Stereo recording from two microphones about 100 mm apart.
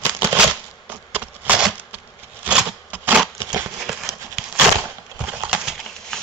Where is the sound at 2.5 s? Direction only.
15° right (ahead or behind).